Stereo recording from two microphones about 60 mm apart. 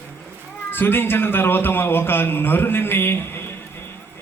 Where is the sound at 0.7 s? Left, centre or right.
Left.